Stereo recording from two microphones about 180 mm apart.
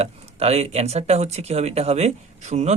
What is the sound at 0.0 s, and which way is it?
Speech, 35° right (ahead or behind).